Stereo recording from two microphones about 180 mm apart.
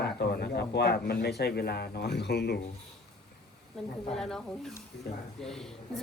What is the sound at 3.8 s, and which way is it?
A woman's voice, centre (ahead or behind).